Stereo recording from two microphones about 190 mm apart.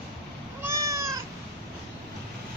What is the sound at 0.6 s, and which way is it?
Cat, 15° right (ahead or behind).